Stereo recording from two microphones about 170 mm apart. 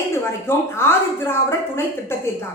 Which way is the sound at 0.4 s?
15° left (ahead or behind).